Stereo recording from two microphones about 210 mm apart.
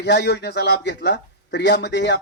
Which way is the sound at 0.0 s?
55° left (ahead or behind).